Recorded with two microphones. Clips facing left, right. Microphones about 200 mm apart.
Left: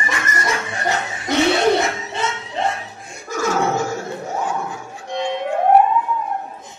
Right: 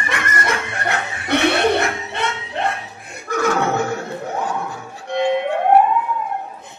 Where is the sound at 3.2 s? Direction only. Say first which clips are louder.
Right 1 dB; 60° right (ahead or behind).